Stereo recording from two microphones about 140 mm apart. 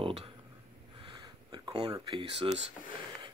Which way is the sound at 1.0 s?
35° right (ahead or behind).